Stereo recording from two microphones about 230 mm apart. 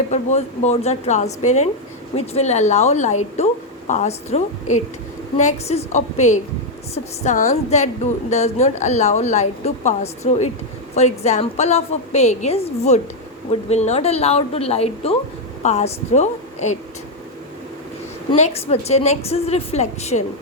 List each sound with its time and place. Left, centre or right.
0.1 s a woman's voice: left
18.3 s a woman's voice: left